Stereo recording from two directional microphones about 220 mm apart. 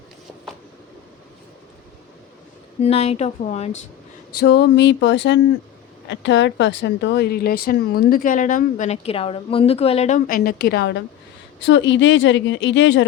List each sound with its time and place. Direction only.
2.8 s speech: 30° left (ahead or behind)
4.4 s a sound: 50° left (ahead or behind)
6.1 s speech: 55° left (ahead or behind)